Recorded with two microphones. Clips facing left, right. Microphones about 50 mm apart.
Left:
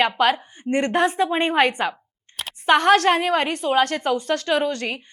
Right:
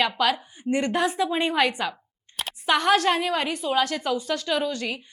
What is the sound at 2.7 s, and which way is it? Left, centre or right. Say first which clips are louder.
A woman's voice: left 5 dB; left.